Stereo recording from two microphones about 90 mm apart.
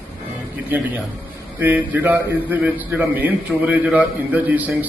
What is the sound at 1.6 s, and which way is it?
A man's voice, 20° right (ahead or behind).